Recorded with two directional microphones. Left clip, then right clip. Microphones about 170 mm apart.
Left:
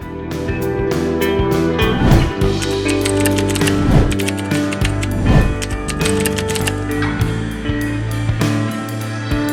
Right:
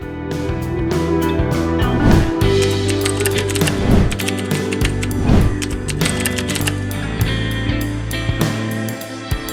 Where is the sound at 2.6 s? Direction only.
Centre (ahead or behind).